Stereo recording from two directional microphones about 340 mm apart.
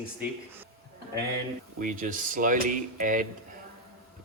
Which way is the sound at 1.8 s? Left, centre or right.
Right.